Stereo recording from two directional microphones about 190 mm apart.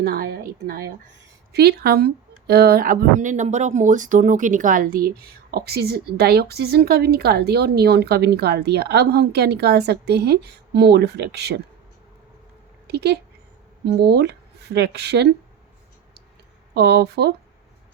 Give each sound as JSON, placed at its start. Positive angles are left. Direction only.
{"t": 0.0, "sound": "speech", "side_deg": -55}
{"t": 1.5, "sound": "speech", "side_deg": -60}
{"t": 12.9, "sound": "a woman's voice", "side_deg": -60}
{"t": 16.7, "sound": "speech", "side_deg": -60}